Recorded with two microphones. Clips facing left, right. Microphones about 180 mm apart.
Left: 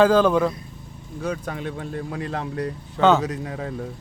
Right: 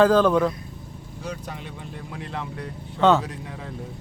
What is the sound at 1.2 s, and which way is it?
Speech, 55° left (ahead or behind).